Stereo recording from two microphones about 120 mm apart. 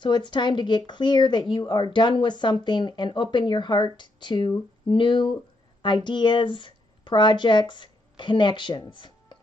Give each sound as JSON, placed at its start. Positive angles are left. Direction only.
{"t": 0.0, "sound": "speech", "side_deg": 40}